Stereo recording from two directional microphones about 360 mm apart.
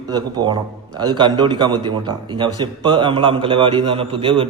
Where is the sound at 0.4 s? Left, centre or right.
Centre.